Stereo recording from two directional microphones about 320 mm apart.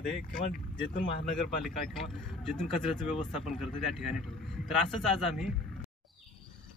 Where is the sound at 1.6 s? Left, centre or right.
Centre.